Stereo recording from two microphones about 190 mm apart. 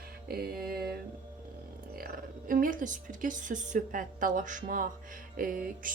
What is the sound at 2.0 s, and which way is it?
Speech, 50° right (ahead or behind).